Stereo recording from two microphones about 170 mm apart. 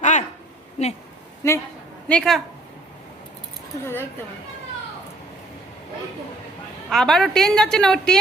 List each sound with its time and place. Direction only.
0.0 s a sound: 45° left (ahead or behind)
0.8 s speech: 40° left (ahead or behind)
1.4 s a man's voice: 15° left (ahead or behind)
2.0 s a woman's voice: 5° left (ahead or behind)
6.9 s a woman's voice: 5° left (ahead or behind)